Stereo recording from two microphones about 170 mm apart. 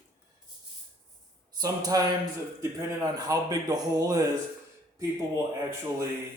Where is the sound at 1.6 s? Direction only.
20° right (ahead or behind).